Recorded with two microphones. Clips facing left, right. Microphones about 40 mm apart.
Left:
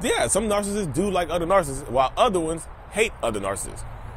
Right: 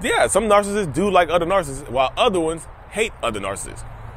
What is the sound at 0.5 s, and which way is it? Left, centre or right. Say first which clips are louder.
A man's voice: right 6 dB; right.